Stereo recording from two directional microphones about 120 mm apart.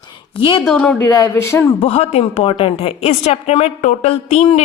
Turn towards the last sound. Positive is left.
turn(degrees=65)  # may be behind; listen again after turning